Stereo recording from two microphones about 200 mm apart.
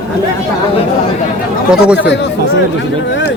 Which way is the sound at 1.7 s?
5° right (ahead or behind).